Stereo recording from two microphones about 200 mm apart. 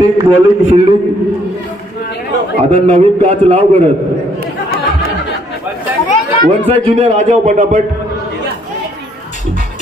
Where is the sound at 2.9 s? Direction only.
30° right (ahead or behind).